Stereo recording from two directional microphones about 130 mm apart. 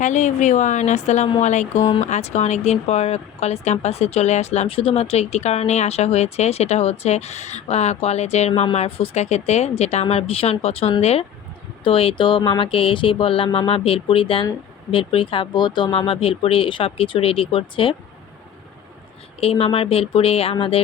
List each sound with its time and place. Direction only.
0.0 s a woman's voice: 65° left (ahead or behind); by 17.9 s 45° left (ahead or behind)
19.4 s speech: 50° left (ahead or behind)